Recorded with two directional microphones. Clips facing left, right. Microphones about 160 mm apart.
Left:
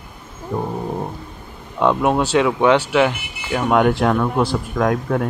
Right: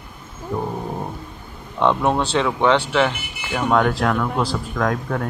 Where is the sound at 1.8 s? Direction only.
5° left (ahead or behind).